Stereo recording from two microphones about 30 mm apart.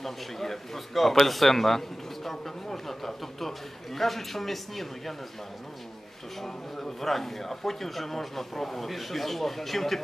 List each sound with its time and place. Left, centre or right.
0.0 s a man's voice: centre
6.4 s a man's voice: centre